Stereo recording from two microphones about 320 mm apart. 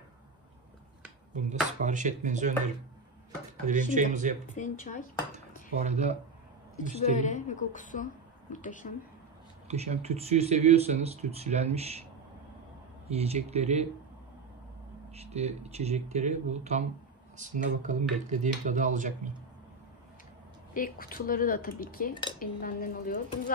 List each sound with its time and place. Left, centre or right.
1.3 s speech: right
5.3 s dishes: right
6.8 s a woman's voice: left
9.7 s speech: centre
13.1 s speech: centre
15.1 s speech: centre
20.7 s a woman's voice: left